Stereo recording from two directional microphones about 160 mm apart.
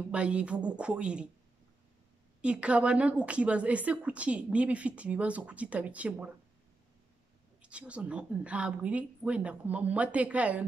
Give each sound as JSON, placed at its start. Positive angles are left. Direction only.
{"t": 0.1, "sound": "a woman's voice", "side_deg": -5}
{"t": 2.4, "sound": "a woman's voice", "side_deg": -5}
{"t": 7.6, "sound": "a woman's voice", "side_deg": -5}